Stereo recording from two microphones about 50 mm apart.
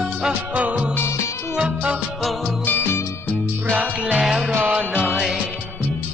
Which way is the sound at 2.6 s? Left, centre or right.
Left.